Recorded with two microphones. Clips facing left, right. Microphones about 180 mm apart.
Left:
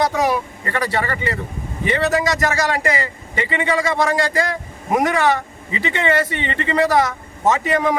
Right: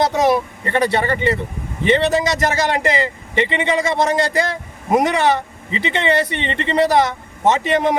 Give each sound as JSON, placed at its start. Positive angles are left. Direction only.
{"t": 0.1, "sound": "speech", "side_deg": -25}